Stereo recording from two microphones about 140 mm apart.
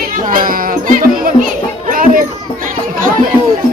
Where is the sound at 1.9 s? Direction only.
80° right.